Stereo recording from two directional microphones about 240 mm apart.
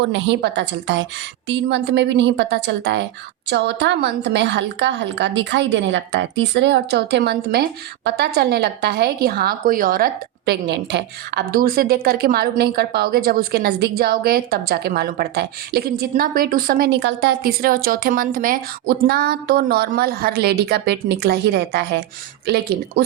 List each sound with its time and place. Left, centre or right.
0.0 s a woman's voice: right